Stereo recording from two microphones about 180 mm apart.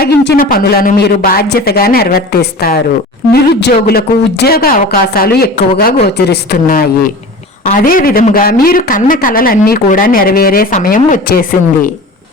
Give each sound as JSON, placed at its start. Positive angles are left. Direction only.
{"t": 0.0, "sound": "a woman's voice", "side_deg": 60}